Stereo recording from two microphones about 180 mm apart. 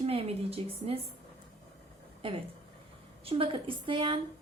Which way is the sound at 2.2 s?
30° right (ahead or behind).